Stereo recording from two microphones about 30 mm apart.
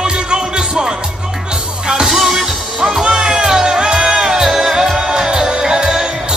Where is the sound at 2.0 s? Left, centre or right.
Centre.